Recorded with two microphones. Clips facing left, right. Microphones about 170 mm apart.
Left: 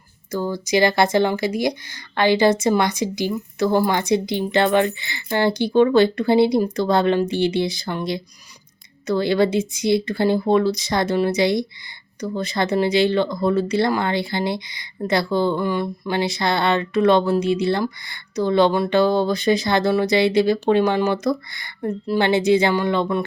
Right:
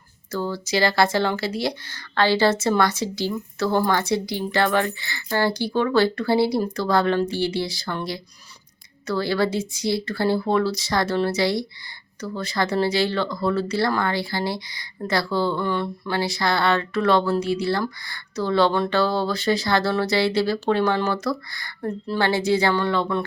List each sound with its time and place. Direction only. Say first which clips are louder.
0.3 s speech: left 3 dB; 15° left (ahead or behind)